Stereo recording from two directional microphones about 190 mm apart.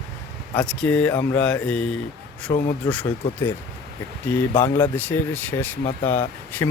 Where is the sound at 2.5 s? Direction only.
25° left (ahead or behind).